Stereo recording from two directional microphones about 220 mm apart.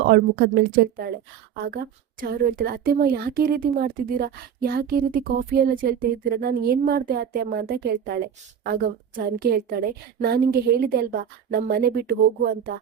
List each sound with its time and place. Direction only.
0.1 s a woman's voice: 45° right (ahead or behind)